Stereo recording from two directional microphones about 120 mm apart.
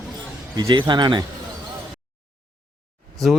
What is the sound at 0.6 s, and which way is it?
Speech, 40° right (ahead or behind).